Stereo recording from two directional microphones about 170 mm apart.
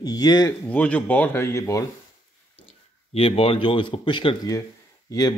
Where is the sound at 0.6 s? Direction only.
10° left (ahead or behind).